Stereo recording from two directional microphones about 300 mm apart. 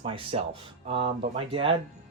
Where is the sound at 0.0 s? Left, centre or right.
Centre.